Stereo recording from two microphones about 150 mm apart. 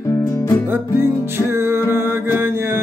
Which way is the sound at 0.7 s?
15° right (ahead or behind).